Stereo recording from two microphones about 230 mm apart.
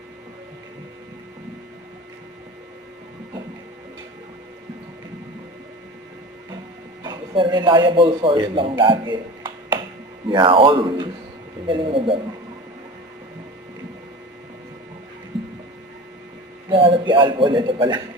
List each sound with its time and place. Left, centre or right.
7.0 s a man's voice: centre
8.8 s a sound: right
10.2 s speech: right
16.6 s a man's voice: right